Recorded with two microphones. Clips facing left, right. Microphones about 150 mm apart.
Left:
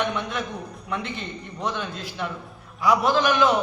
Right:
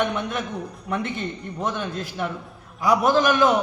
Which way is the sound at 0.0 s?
45° right (ahead or behind).